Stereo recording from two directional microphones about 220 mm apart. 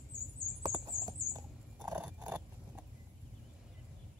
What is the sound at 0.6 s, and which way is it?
Rodents, 20° right (ahead or behind).